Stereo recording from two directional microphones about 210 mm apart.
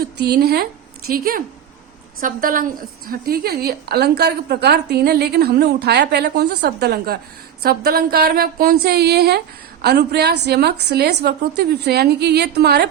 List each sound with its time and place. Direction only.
0.0 s a woman's voice: 50° right (ahead or behind)